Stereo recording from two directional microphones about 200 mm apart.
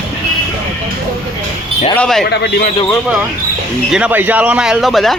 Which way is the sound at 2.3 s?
55° left (ahead or behind).